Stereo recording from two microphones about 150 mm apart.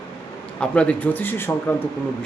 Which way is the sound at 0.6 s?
10° left (ahead or behind).